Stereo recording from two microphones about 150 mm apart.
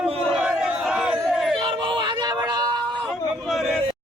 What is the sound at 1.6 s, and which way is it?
Music, 35° right (ahead or behind).